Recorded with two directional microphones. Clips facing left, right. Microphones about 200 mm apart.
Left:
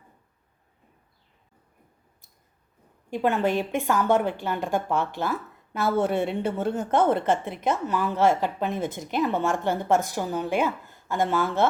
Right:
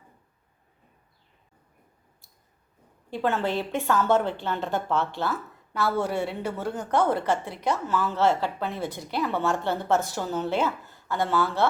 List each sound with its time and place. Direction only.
3.1 s a woman's voice: 15° left (ahead or behind)